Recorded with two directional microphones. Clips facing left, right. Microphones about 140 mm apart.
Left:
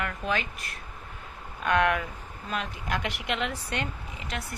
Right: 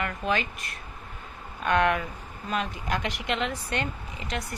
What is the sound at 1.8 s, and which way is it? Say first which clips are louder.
Speech: right 1 dB; 10° left (ahead or behind).